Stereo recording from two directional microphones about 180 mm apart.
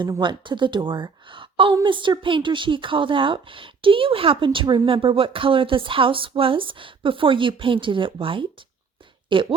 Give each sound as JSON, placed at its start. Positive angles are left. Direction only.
{"t": 0.0, "sound": "a woman's voice", "side_deg": -25}